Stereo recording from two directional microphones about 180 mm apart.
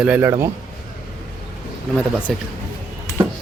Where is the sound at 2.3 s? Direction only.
5° left (ahead or behind).